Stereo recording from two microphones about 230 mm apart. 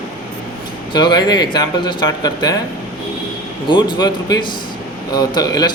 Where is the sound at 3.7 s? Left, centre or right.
Centre.